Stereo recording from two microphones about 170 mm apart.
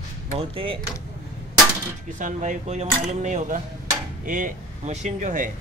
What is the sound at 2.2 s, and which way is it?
Speech, 45° right (ahead or behind).